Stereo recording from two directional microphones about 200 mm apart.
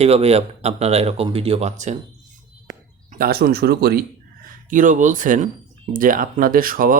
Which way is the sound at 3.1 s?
50° right (ahead or behind).